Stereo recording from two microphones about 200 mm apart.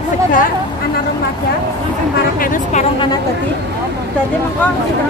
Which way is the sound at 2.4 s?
40° left (ahead or behind).